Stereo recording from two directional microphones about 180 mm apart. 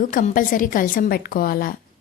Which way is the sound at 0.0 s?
45° left (ahead or behind).